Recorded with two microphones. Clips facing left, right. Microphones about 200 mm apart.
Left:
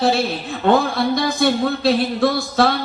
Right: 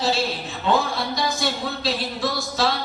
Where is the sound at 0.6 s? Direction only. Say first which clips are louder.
Left 6 dB; 55° left (ahead or behind).